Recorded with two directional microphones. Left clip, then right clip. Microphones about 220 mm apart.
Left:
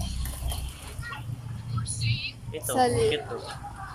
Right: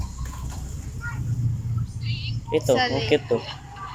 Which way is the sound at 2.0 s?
35° left (ahead or behind).